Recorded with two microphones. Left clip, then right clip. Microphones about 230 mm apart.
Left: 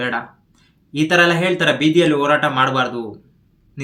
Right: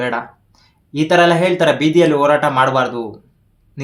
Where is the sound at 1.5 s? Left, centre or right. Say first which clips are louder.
Right 2 dB; centre.